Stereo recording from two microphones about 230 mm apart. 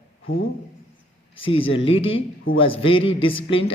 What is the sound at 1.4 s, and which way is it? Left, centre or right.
Speech, left.